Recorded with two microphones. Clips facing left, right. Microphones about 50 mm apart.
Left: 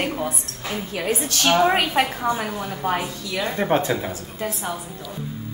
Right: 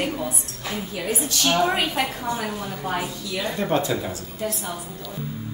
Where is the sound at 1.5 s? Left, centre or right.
Left.